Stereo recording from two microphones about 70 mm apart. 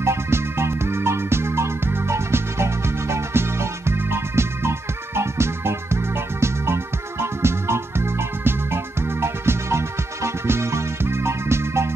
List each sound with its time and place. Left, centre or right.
0.0 s music: right